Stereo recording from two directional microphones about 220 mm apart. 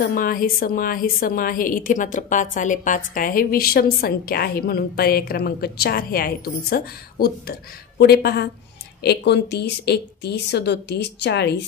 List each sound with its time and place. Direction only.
0.0 s a woman's voice: 40° left (ahead or behind)